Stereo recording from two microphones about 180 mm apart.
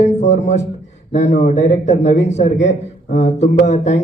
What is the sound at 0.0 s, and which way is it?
A man's voice, 40° left (ahead or behind).